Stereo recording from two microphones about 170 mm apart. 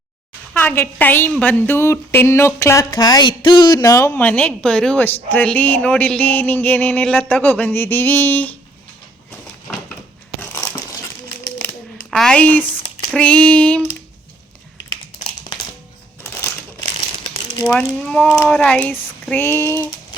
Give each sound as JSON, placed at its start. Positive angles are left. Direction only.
{"t": 0.6, "sound": "a woman's voice", "side_deg": 10}
{"t": 10.5, "sound": "crumpling", "side_deg": 20}
{"t": 12.1, "sound": "speech", "side_deg": 5}
{"t": 17.7, "sound": "a woman's voice", "side_deg": 5}